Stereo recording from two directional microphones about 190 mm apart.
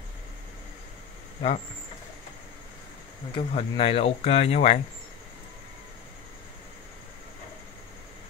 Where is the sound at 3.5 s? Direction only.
30° left (ahead or behind).